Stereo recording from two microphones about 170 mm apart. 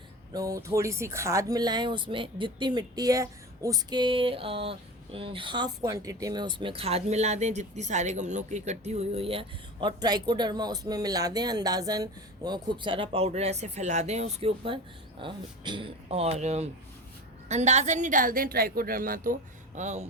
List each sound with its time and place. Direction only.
0.3 s a woman's voice: 20° right (ahead or behind); by 20.1 s 45° right (ahead or behind)